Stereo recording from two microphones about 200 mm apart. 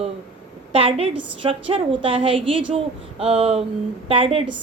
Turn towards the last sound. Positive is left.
turn(degrees=-30)  # may be behind; listen again after turning